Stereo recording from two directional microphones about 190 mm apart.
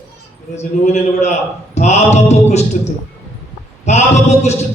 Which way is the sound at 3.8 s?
35° left (ahead or behind).